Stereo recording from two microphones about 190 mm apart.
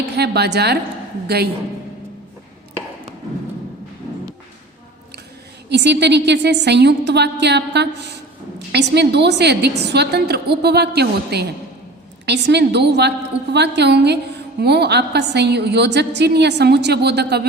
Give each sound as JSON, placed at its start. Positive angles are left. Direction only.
{"t": 0.2, "sound": "a woman's voice", "side_deg": -60}
{"t": 5.6, "sound": "a woman's voice", "side_deg": -65}